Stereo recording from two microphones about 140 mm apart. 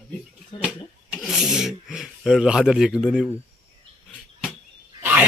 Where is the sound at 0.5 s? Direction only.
35° left (ahead or behind).